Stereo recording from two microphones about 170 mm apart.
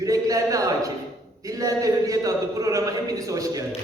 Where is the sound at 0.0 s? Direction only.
20° right (ahead or behind).